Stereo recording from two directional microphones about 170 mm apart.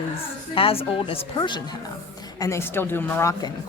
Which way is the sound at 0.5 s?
35° left (ahead or behind).